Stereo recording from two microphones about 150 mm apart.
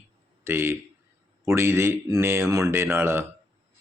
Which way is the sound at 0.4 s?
15° right (ahead or behind).